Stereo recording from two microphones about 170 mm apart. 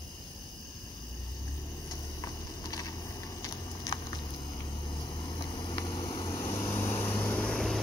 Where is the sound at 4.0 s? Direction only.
30° left (ahead or behind).